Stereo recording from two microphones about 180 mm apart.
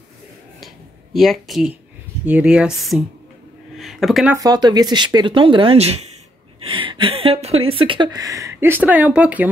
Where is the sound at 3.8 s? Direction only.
Centre (ahead or behind).